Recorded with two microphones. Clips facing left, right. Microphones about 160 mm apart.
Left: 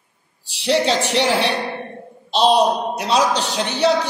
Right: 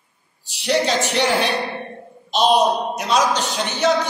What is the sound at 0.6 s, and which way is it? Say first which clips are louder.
Speech: left 1 dB; 30° left (ahead or behind).